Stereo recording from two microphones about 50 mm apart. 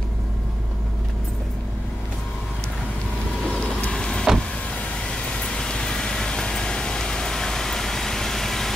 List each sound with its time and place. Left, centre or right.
3.4 s vehicle: centre